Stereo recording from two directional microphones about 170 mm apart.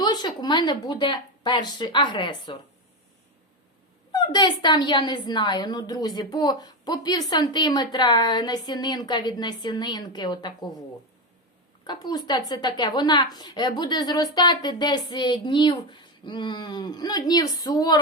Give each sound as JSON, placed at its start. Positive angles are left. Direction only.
{"t": 0.0, "sound": "a woman's voice", "side_deg": 25}
{"t": 4.1, "sound": "a woman's voice", "side_deg": 25}
{"t": 11.9, "sound": "a woman's voice", "side_deg": 25}